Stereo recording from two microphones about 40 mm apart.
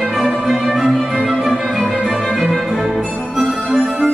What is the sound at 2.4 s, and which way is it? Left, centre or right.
Music, centre.